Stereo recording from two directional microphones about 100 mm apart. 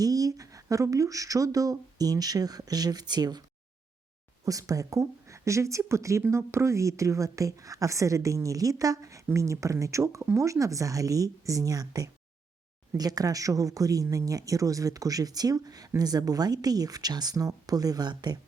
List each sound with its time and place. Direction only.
0.0 s speech: 40° right (ahead or behind)
4.4 s speech: 35° right (ahead or behind)